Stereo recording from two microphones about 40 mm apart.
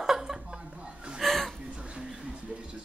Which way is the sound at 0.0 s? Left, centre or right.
Centre.